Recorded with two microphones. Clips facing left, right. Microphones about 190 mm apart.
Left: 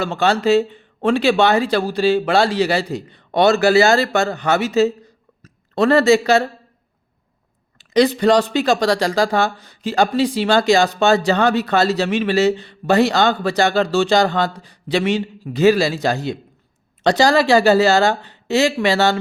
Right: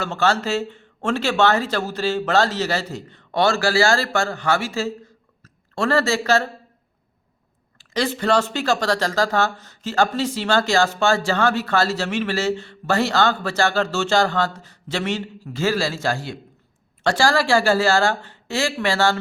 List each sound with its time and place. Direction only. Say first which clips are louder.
0.0 s speech: left 4 dB; 15° left (ahead or behind)
7.8 s speech: left 8 dB; 20° left (ahead or behind)